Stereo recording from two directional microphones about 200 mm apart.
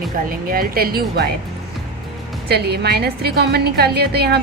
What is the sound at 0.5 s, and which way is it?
Speech, 45° right (ahead or behind).